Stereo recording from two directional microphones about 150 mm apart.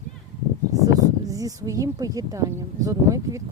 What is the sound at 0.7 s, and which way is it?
Speech, 25° right (ahead or behind).